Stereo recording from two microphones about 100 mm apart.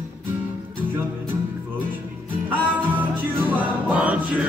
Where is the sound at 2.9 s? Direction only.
15° right (ahead or behind).